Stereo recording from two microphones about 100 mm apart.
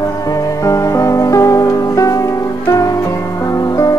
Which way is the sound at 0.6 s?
30° left (ahead or behind).